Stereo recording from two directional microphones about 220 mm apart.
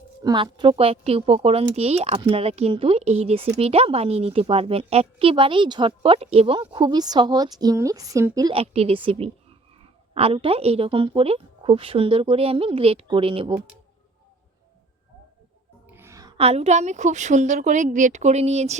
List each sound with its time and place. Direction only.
0.2 s a woman's voice: 20° right (ahead or behind)
15.9 s music: 10° right (ahead or behind)
16.4 s a woman's voice: 25° right (ahead or behind)